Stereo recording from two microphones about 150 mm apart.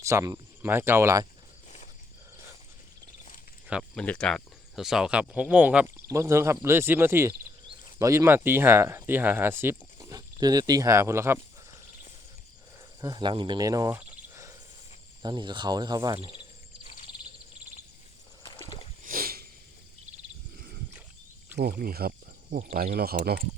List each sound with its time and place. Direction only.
0.0 s speech: 20° right (ahead or behind)
3.9 s speech: 10° left (ahead or behind); by 11.3 s 20° right (ahead or behind)
13.0 s speech: 25° right (ahead or behind)
15.2 s speech: 30° right (ahead or behind)
16.8 s bird: 55° left (ahead or behind)
19.0 s a sound: 80° right
21.6 s speech: 85° right